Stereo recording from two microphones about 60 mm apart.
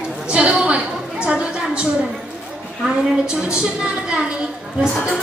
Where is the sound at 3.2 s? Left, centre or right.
Centre.